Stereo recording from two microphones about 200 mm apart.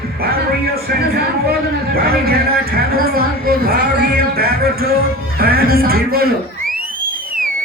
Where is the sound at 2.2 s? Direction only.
50° right (ahead or behind).